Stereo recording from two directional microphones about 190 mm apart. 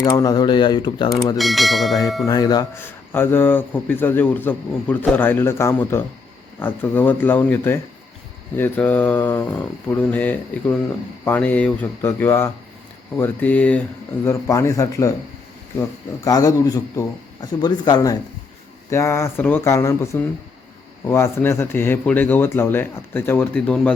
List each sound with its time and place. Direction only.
0.0 s speech: 20° left (ahead or behind)
1.4 s bell: centre (ahead or behind)
2.2 s a man's voice: 20° left (ahead or behind)
16.2 s a man's voice: 15° left (ahead or behind)
21.1 s a man's voice: 15° left (ahead or behind)